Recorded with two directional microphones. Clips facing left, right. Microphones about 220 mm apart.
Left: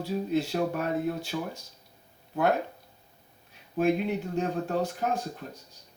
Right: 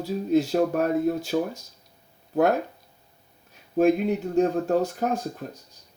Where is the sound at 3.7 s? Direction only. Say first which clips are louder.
Right 5 dB; 40° right (ahead or behind).